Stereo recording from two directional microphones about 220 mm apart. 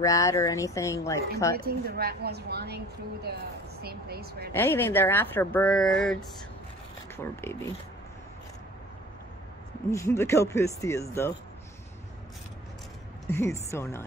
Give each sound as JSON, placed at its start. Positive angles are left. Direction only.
{"t": 0.0, "sound": "speech", "side_deg": 15}
{"t": 1.6, "sound": "a woman's voice", "side_deg": -45}
{"t": 3.8, "sound": "a woman's voice", "side_deg": -45}
{"t": 4.5, "sound": "speech", "side_deg": 10}
{"t": 7.4, "sound": "speech", "side_deg": 10}
{"t": 9.8, "sound": "speech", "side_deg": 10}
{"t": 13.3, "sound": "speech", "side_deg": 10}